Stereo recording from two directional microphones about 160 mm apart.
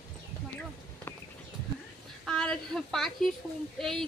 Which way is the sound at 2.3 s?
5° left (ahead or behind).